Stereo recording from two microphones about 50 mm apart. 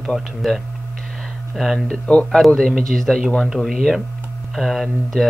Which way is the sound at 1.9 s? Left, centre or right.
Left.